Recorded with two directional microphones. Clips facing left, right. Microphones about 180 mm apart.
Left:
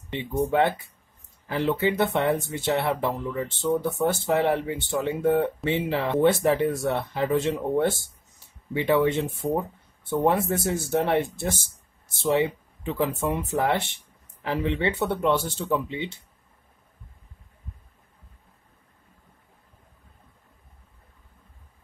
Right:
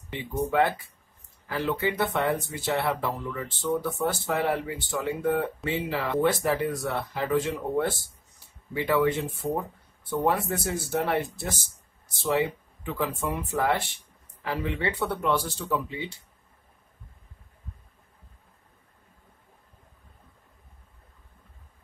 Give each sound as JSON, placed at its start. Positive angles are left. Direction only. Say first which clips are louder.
{"t": 0.1, "sound": "speech", "louder": "left 3 dB", "side_deg": 25}
{"t": 12.8, "sound": "speech", "louder": "left 4 dB", "side_deg": 25}